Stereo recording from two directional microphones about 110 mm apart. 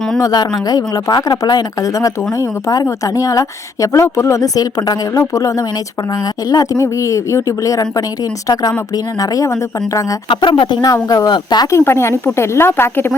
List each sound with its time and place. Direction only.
0.2 s speech: 35° left (ahead or behind)
9.2 s speech: 30° left (ahead or behind)
10.2 s speech: 45° left (ahead or behind)
11.7 s a woman's voice: 25° left (ahead or behind)